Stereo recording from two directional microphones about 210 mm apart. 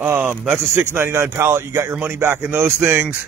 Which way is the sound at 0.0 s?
5° right (ahead or behind).